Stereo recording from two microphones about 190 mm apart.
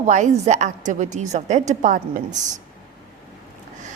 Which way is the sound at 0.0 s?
40° right (ahead or behind).